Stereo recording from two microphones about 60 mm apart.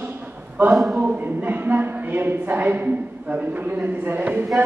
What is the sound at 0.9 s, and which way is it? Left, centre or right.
A woman's voice, right.